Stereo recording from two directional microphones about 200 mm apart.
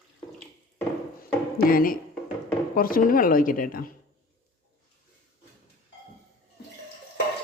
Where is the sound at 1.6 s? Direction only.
45° left (ahead or behind).